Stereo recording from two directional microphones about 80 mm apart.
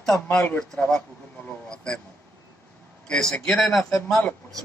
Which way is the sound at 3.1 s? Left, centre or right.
Centre.